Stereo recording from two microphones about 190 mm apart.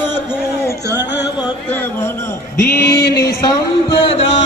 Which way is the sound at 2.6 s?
55° left (ahead or behind).